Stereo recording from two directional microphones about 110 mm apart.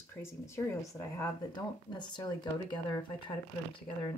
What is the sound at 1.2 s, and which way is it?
Speech, 40° left (ahead or behind).